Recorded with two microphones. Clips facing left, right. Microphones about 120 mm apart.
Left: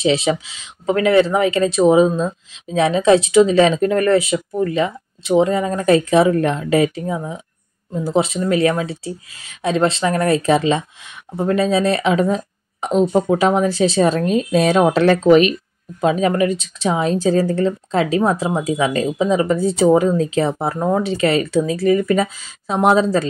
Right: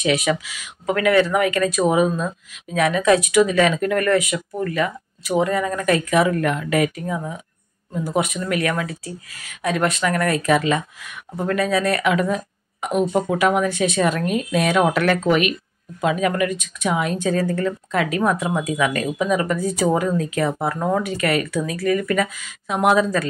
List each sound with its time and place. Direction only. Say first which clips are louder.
0.0 s speech: left 3 dB; 25° left (ahead or behind)